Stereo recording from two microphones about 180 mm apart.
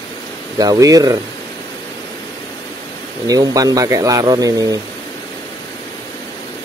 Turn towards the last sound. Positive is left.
turn(degrees=-20)  # may be behind; listen again after turning